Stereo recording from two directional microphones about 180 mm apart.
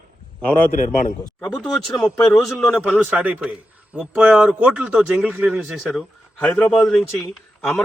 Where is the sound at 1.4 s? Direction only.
5° left (ahead or behind).